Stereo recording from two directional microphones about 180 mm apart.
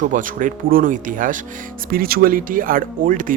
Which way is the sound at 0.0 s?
45° right (ahead or behind).